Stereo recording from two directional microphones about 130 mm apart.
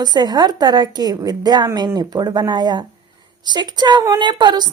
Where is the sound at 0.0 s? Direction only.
30° right (ahead or behind).